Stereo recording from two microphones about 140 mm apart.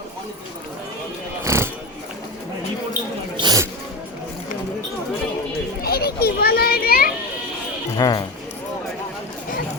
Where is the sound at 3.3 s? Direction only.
30° right (ahead or behind).